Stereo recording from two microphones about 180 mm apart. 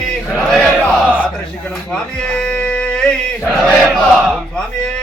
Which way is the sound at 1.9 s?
5° left (ahead or behind).